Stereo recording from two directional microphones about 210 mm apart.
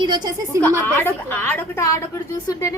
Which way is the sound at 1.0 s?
10° left (ahead or behind).